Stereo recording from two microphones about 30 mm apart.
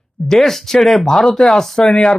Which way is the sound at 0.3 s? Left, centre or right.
Centre.